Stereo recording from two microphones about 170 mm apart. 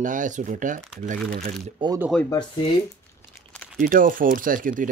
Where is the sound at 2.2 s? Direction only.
25° left (ahead or behind).